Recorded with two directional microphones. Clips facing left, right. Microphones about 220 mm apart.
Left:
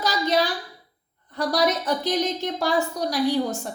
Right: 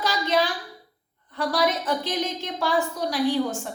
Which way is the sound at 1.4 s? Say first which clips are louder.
Left 1 dB; 40° left (ahead or behind).